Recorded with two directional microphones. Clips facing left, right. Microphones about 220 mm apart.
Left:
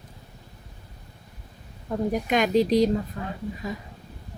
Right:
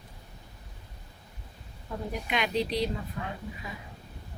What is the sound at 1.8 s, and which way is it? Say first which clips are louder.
Speech: left 10 dB; 45° left (ahead or behind).